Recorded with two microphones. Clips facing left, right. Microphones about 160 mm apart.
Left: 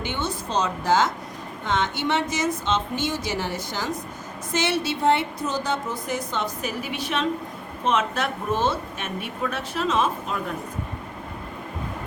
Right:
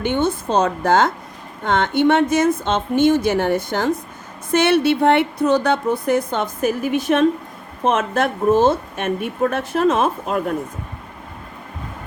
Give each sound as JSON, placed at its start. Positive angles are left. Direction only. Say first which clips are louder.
{"t": 0.0, "sound": "speech", "louder": "right 9 dB", "side_deg": -55}